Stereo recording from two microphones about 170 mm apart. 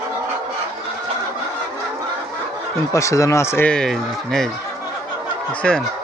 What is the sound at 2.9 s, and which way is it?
Speech, 20° left (ahead or behind).